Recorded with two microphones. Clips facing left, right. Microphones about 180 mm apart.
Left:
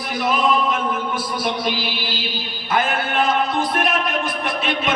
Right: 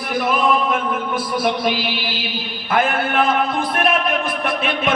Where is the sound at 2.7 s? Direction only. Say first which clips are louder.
Right 2 dB; 55° right (ahead or behind).